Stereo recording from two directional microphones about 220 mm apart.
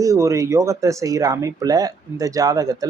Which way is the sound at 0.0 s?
15° right (ahead or behind).